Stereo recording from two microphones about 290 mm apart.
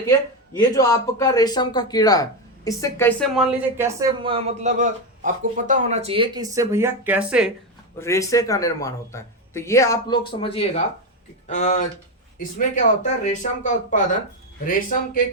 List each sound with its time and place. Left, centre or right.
0.7 s a man's voice: centre
7.9 s a man's voice: centre; by 15.2 s left